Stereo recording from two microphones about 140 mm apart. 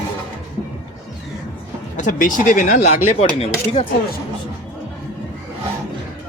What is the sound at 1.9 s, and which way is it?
Speech, 65° left (ahead or behind).